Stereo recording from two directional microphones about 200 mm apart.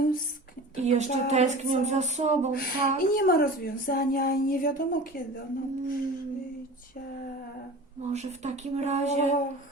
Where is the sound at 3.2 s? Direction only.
50° left (ahead or behind).